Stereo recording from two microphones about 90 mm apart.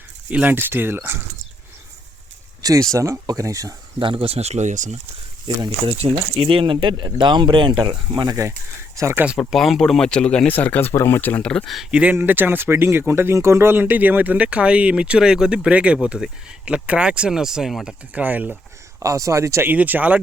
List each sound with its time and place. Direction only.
0.3 s speech: 15° right (ahead or behind)
2.6 s speech: 45° right (ahead or behind)
4.0 s speech: 80° right
5.8 s speech: 90° right; by 8.4 s 55° right (ahead or behind)
9.0 s speech: 30° right (ahead or behind)
9.4 s speech: centre (ahead or behind); by 11.4 s 20° left (ahead or behind)
11.4 s speech: 5° left (ahead or behind)
11.9 s speech: 15° right (ahead or behind)
18.1 s speech: 20° right (ahead or behind)
19.0 s speech: 35° right (ahead or behind)
19.7 s speech: 15° right (ahead or behind)